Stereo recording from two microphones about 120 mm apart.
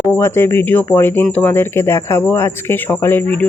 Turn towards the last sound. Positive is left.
turn(degrees=15)  # may be behind; listen again after turning